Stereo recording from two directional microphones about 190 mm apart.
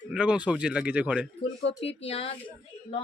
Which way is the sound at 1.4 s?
30° left (ahead or behind).